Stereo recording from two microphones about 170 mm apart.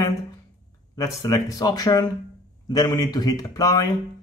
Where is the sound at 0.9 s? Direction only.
20° left (ahead or behind).